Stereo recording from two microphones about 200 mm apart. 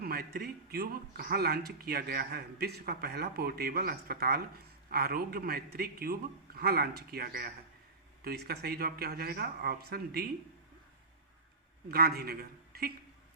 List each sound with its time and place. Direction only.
0.0 s speech: 50° right (ahead or behind)
11.9 s a man's voice: 50° right (ahead or behind)